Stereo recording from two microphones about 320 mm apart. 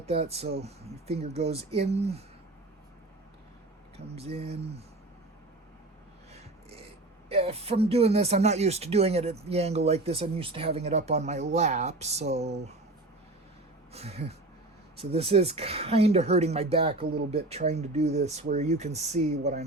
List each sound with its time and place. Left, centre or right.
0.0 s speech: centre
3.9 s speech: centre
6.3 s filing: centre
7.3 s speech: centre
13.9 s speech: centre